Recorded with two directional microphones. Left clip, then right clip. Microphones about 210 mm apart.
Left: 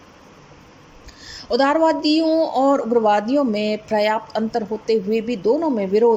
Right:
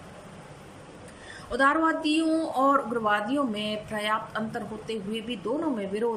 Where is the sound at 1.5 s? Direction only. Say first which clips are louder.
Left 7 dB; 25° left (ahead or behind).